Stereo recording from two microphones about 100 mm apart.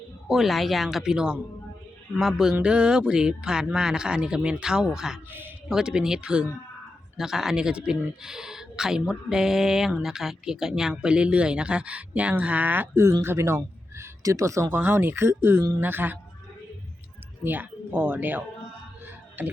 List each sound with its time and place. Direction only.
0.3 s speech: centre (ahead or behind)
5.3 s speech: 20° right (ahead or behind)
5.6 s speech: 5° right (ahead or behind)
17.4 s speech: 20° right (ahead or behind)